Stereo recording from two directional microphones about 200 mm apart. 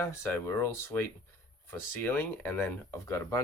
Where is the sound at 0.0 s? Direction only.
15° left (ahead or behind).